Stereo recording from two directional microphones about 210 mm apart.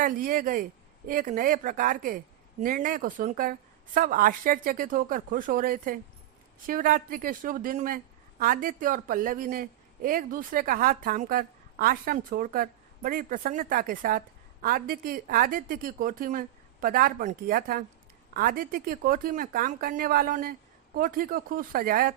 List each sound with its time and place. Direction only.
0.0 s a woman's voice: 40° right (ahead or behind)